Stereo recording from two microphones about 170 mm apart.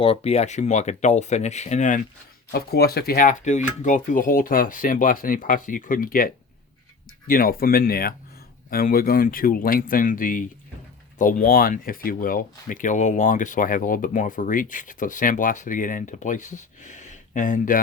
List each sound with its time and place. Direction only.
0.0 s speech: 35° left (ahead or behind)
2.5 s speech: 65° left (ahead or behind); by 17.7 s 50° left (ahead or behind)